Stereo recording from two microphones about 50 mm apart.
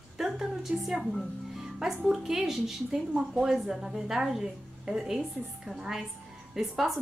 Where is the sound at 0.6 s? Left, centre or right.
Centre.